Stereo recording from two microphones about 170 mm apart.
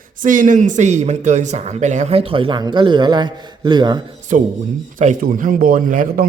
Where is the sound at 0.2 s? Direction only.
50° right (ahead or behind); by 4.0 s 25° right (ahead or behind).